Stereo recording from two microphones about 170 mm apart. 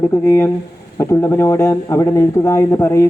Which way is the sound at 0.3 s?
15° left (ahead or behind).